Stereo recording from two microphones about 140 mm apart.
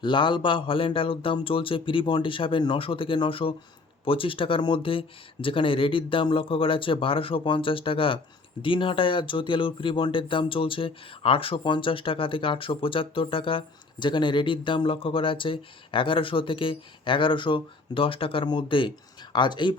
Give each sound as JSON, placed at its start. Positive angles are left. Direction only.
{"t": 0.0, "sound": "speech", "side_deg": 35}